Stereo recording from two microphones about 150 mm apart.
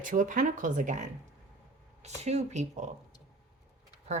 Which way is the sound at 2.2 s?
50° right (ahead or behind).